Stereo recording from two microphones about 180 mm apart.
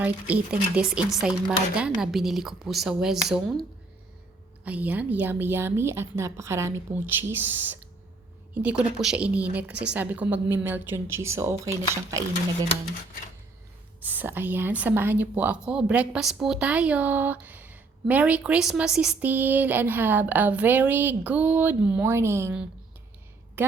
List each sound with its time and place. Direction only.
0.0 s speech: 10° right (ahead or behind)
14.0 s a woman's voice: 10° right (ahead or behind)